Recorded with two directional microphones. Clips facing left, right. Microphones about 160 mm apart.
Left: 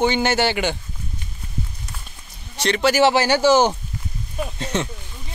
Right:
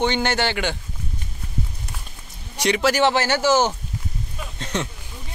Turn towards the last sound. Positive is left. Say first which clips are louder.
# left 3 dB
turn(degrees=0)  # may be behind; listen again after turning